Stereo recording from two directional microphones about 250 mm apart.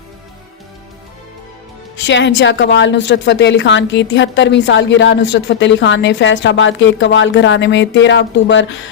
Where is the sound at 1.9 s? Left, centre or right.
Left.